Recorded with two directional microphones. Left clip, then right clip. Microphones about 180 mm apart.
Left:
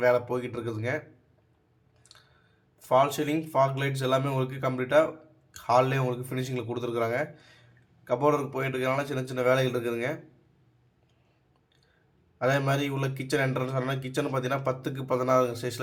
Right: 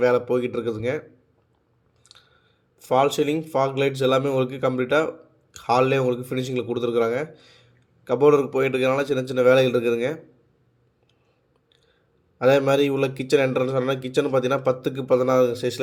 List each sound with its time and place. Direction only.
0.0 s speech: 15° right (ahead or behind)
2.1 s a sound: 15° right (ahead or behind)
2.7 s speech: 15° right (ahead or behind)
12.4 s speech: 20° right (ahead or behind)